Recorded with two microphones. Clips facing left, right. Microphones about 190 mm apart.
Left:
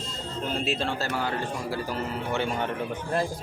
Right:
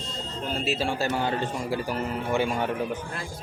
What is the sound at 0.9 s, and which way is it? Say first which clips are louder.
Speech: right 3 dB; 15° right (ahead or behind).